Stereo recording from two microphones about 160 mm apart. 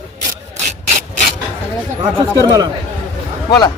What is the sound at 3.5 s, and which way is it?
Speech, 25° left (ahead or behind).